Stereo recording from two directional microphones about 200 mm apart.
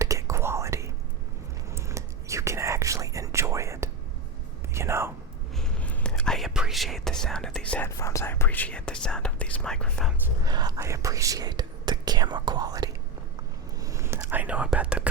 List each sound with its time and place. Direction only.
0.0 s whispering: 15° right (ahead or behind)
5.5 s speech: 5° left (ahead or behind)
10.4 s speech: 20° right (ahead or behind)
13.8 s whispering: 15° right (ahead or behind)